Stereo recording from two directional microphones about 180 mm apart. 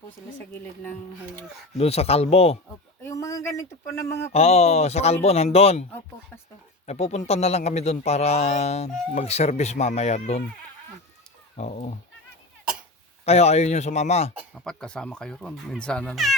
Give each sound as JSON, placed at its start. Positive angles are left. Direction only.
{"t": 1.8, "sound": "speech", "side_deg": 35}
{"t": 3.0, "sound": "speech", "side_deg": 15}
{"t": 4.3, "sound": "speech", "side_deg": 35}
{"t": 6.8, "sound": "speech", "side_deg": 40}
{"t": 11.5, "sound": "speech", "side_deg": 40}
{"t": 13.2, "sound": "speech", "side_deg": 35}
{"t": 14.3, "sound": "speech", "side_deg": 0}